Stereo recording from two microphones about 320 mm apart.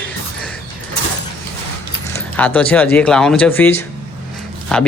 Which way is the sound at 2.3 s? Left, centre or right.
Centre.